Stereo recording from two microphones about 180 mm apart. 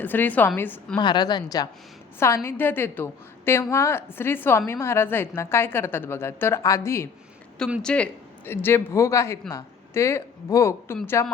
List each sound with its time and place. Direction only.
0.0 s a woman's voice: 10° left (ahead or behind)
0.9 s a woman's voice: 25° left (ahead or behind)